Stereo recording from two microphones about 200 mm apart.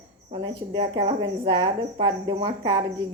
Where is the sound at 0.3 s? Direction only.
25° right (ahead or behind).